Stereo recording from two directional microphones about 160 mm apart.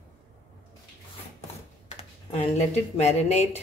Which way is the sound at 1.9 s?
40° left (ahead or behind).